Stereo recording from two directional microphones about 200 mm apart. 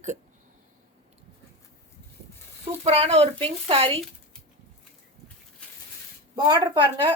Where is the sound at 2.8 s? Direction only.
30° right (ahead or behind).